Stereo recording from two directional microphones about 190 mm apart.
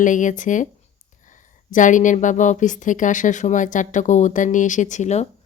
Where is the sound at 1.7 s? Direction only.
40° left (ahead or behind).